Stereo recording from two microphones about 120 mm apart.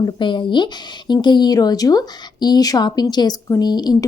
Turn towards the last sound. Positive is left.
turn(degrees=35)  # may be behind; listen again after turning